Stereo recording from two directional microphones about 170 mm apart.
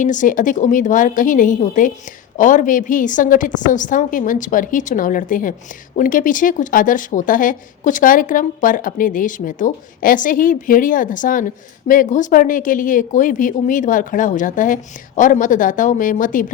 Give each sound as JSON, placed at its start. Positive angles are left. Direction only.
{"t": 0.0, "sound": "speech", "side_deg": 50}